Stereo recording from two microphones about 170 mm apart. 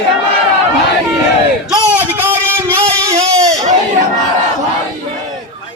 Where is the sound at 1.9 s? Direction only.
10° right (ahead or behind).